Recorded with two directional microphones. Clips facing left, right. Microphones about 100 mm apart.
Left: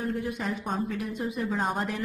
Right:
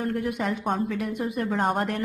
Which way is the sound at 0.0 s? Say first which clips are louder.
Right 4 dB; 70° right (ahead or behind).